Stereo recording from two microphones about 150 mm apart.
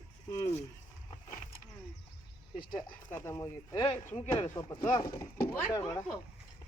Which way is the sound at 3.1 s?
20° left (ahead or behind).